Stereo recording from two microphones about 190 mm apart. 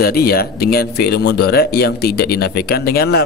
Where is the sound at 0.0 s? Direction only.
55° left (ahead or behind).